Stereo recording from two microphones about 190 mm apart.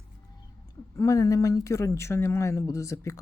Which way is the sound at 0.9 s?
15° left (ahead or behind).